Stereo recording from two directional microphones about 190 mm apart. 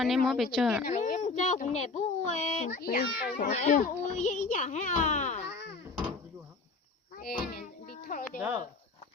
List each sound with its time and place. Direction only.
0.0 s a woman's voice: centre (ahead or behind)
0.9 s speech: 40° left (ahead or behind)
2.8 s a child's voice: 55° left (ahead or behind)
3.5 s a child's voice: 40° left (ahead or behind)
7.2 s a sound: 50° left (ahead or behind)
8.4 s speech: 10° right (ahead or behind)